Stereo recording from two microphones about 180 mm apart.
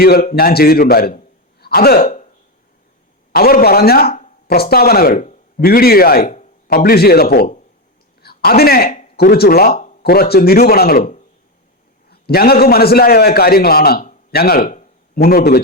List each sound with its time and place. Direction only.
0.0 s a man's voice: 60° left (ahead or behind)
3.3 s a man's voice: 60° left (ahead or behind)
8.2 s a sound: 60° left (ahead or behind)
9.1 s a man's voice: 60° left (ahead or behind)